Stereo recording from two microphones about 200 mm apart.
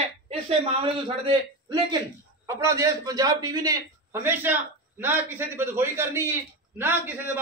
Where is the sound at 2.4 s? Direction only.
15° right (ahead or behind).